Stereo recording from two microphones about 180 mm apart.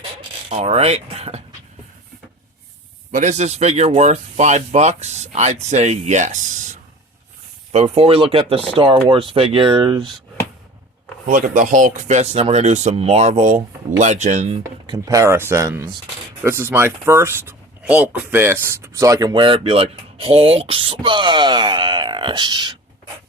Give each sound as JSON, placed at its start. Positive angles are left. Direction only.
{"t": 0.5, "sound": "speech", "side_deg": -35}
{"t": 3.1, "sound": "speech", "side_deg": -40}
{"t": 11.3, "sound": "speech", "side_deg": -45}
{"t": 14.6, "sound": "speech", "side_deg": -20}